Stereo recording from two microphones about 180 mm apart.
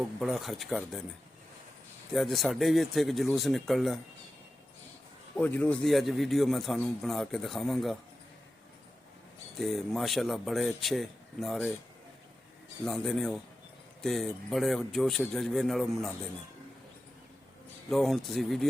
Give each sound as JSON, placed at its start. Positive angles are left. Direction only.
{"t": 0.0, "sound": "a man's voice", "side_deg": 0}
{"t": 2.1, "sound": "a man's voice", "side_deg": 0}
{"t": 5.4, "sound": "a man's voice", "side_deg": 10}
{"t": 9.6, "sound": "a man's voice", "side_deg": 0}
{"t": 12.8, "sound": "a man's voice", "side_deg": 5}
{"t": 17.8, "sound": "a man's voice", "side_deg": 0}